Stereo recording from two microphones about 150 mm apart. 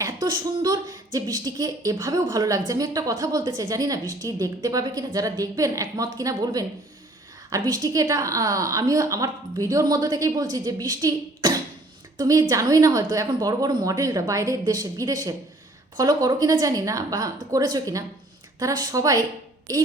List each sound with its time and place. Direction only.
0.0 s a woman's voice: 30° right (ahead or behind)